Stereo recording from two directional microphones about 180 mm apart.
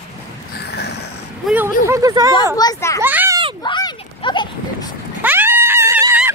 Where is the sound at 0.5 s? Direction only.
65° left (ahead or behind).